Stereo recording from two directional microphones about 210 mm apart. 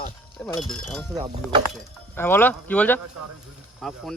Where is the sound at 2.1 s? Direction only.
10° left (ahead or behind).